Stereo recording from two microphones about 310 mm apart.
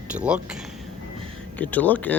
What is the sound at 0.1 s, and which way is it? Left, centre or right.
Speech, centre.